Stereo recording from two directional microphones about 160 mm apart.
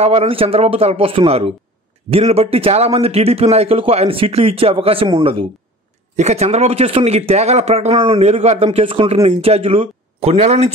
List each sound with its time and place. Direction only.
0.0 s a man's voice: 40° right (ahead or behind)